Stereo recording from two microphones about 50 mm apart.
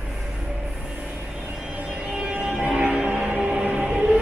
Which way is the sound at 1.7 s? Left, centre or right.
Right.